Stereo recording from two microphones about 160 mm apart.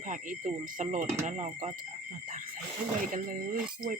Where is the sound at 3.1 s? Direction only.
55° right (ahead or behind).